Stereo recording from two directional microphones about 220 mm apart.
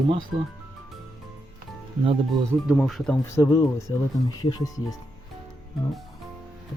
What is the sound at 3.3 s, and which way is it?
Speech, 15° left (ahead or behind).